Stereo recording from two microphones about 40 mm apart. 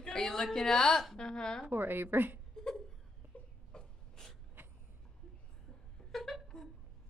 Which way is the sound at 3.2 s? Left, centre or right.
Right.